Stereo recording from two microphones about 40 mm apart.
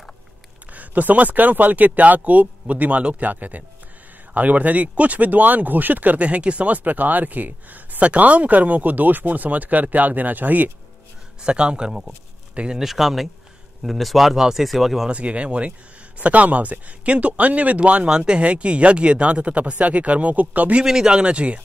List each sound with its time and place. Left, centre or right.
0.7 s speech: right
6.2 s speech: right
6.8 s speech: right
8.0 s speech: right
11.4 s speech: right
12.7 s speech: centre
15.0 s speech: right
18.0 s speech: right
20.8 s speech: centre
21.1 s speech: right